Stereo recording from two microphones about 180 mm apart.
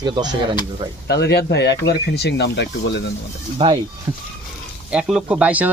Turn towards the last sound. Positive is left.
turn(degrees=-10)  # may be behind; listen again after turning